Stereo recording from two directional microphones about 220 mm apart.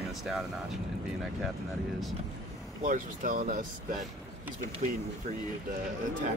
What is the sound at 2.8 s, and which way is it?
Speech, 35° right (ahead or behind).